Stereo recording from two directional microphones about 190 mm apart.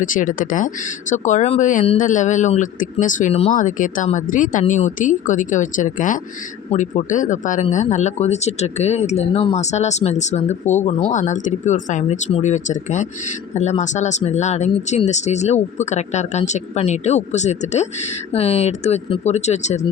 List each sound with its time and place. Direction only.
0.0 s speech: 45° left (ahead or behind)